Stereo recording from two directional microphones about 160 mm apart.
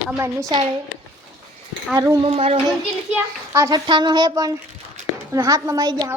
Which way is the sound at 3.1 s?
15° right (ahead or behind).